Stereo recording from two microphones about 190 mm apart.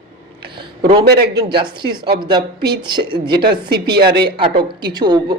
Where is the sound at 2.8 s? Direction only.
25° right (ahead or behind).